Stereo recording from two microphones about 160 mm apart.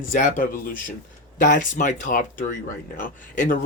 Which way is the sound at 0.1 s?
55° left (ahead or behind).